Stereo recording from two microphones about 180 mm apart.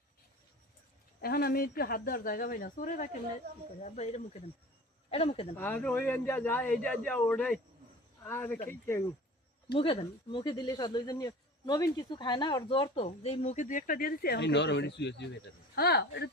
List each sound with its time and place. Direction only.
1.2 s speech: 60° left (ahead or behind); by 5.5 s 30° left (ahead or behind)
5.5 s speech: 10° left (ahead or behind)
9.7 s speech: 30° left (ahead or behind); by 16.3 s 70° left (ahead or behind)